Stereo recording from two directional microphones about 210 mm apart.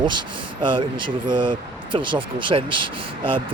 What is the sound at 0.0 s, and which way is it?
Speech, 20° right (ahead or behind).